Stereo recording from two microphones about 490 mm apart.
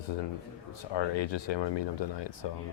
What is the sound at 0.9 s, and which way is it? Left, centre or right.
Speech, left.